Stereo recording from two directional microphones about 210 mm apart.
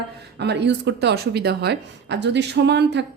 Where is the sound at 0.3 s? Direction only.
55° right (ahead or behind).